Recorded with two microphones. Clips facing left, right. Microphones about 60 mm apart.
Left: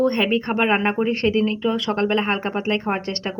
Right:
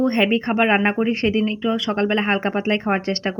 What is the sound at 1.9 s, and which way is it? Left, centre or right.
Speech, right.